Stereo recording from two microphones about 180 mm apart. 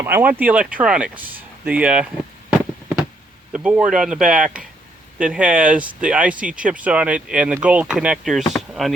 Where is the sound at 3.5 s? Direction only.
5° right (ahead or behind).